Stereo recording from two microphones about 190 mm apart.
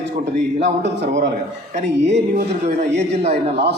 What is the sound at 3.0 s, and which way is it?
Speech, 35° right (ahead or behind).